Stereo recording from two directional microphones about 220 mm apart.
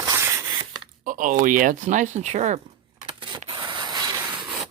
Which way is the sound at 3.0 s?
20° right (ahead or behind).